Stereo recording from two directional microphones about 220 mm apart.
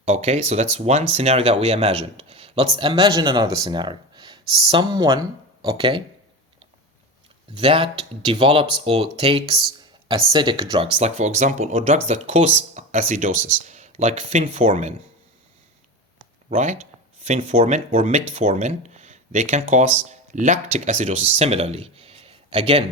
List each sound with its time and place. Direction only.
0.0 s speech: 30° right (ahead or behind)
4.4 s speech: centre (ahead or behind)
4.7 s speech: 20° right (ahead or behind)
7.5 s speech: 25° right (ahead or behind)
11.0 s speech: 35° right (ahead or behind)
16.5 s speech: 35° right (ahead or behind)